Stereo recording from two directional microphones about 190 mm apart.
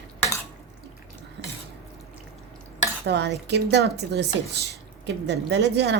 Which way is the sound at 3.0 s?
65° right (ahead or behind).